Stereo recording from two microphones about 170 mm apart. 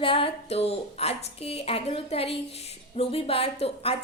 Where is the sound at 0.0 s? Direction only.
30° left (ahead or behind).